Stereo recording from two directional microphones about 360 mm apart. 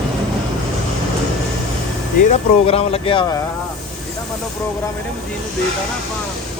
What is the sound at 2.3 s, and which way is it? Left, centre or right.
Speech, centre.